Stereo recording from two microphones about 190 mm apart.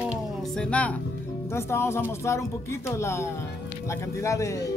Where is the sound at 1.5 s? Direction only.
15° left (ahead or behind).